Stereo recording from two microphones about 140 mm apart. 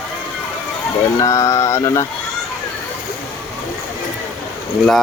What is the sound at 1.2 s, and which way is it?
Speech, 20° left (ahead or behind).